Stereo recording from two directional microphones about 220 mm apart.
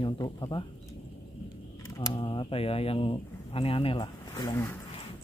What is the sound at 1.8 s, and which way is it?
Speech, 20° left (ahead or behind).